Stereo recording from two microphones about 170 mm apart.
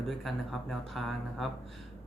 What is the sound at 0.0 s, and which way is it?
Speech, centre (ahead or behind).